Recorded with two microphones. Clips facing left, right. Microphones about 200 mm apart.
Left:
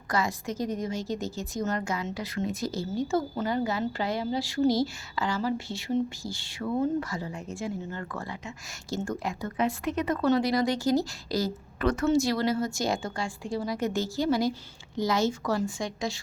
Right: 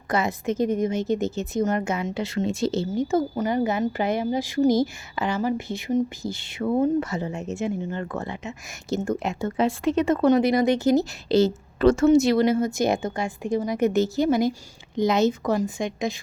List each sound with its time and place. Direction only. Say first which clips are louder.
0.1 s a woman's voice: right 5 dB; 20° right (ahead or behind)